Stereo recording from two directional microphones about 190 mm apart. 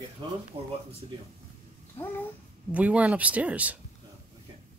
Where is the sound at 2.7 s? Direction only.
5° right (ahead or behind).